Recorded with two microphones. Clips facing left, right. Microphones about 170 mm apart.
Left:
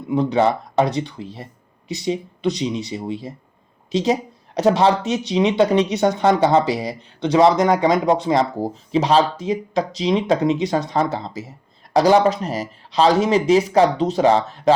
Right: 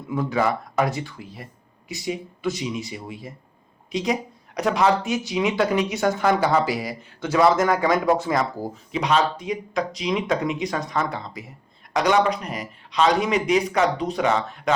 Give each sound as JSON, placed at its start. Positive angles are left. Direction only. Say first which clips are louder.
{"t": 0.1, "sound": "speech", "louder": "left 5 dB", "side_deg": 20}